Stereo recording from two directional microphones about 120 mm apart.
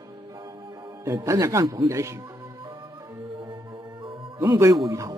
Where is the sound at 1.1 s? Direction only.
25° right (ahead or behind).